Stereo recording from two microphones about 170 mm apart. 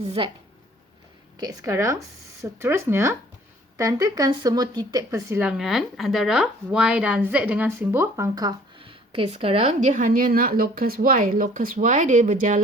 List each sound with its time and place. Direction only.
0.0 s speech: 35° right (ahead or behind)
1.4 s speech: 20° right (ahead or behind)
5.4 s speech: 5° right (ahead or behind); by 12.6 s 45° right (ahead or behind)